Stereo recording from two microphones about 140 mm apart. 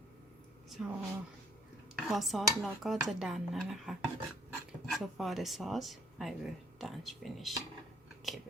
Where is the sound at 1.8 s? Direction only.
Centre (ahead or behind).